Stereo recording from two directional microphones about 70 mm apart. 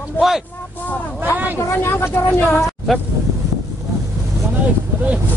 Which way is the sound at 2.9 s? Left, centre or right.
Centre.